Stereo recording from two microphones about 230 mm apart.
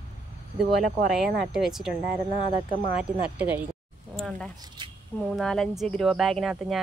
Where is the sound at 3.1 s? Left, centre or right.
Centre.